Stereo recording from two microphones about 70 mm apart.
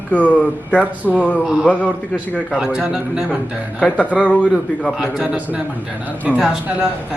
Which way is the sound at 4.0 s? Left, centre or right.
Left.